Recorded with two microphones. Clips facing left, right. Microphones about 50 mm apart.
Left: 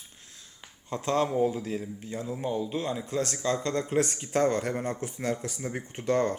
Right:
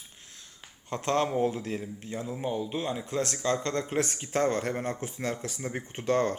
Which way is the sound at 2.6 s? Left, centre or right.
Right.